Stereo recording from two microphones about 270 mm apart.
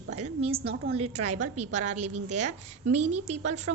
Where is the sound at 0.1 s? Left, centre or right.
Right.